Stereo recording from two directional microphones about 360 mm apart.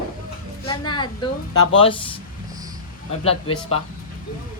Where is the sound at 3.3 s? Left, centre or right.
Centre.